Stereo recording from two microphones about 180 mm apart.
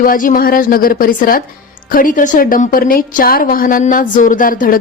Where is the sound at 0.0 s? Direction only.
50° left (ahead or behind).